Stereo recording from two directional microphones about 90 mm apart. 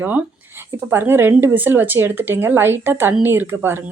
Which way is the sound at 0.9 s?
25° right (ahead or behind).